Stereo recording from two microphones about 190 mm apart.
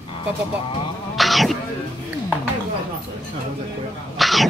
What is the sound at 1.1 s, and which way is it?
Cat, centre (ahead or behind).